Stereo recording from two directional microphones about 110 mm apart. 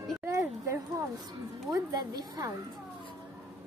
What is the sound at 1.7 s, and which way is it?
Speech, 35° right (ahead or behind).